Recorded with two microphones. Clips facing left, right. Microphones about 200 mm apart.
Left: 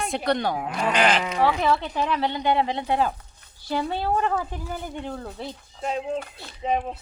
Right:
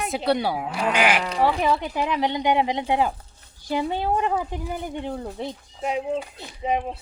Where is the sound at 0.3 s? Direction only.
10° right (ahead or behind).